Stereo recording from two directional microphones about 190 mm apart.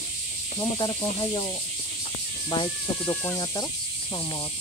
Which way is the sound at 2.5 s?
25° left (ahead or behind).